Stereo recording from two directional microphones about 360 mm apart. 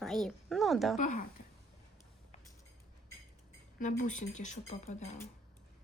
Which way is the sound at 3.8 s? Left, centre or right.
Left.